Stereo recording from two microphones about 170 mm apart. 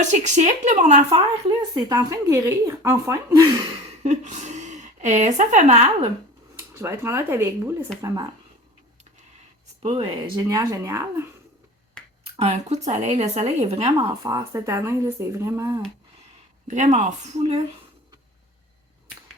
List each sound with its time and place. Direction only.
0.0 s a woman's voice: 45° right (ahead or behind)
1.5 s speech: 20° right (ahead or behind)
4.0 s a woman's voice: 40° right (ahead or behind)
6.6 s speech: 15° right (ahead or behind)
9.8 s speech: 30° right (ahead or behind)
12.4 s speech: 40° right (ahead or behind)
14.2 s speech: 20° right (ahead or behind)
16.6 s a woman's voice: 45° right (ahead or behind)